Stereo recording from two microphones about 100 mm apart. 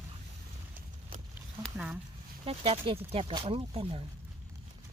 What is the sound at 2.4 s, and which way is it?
Speech, 70° right (ahead or behind).